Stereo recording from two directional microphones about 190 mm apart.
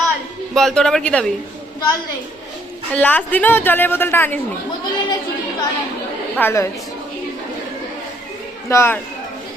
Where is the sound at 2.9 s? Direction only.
10° left (ahead or behind).